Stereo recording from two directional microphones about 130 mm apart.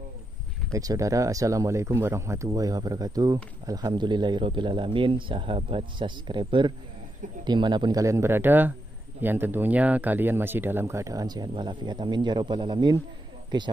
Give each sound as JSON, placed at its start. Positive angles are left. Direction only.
{"t": 0.7, "sound": "speech", "side_deg": -25}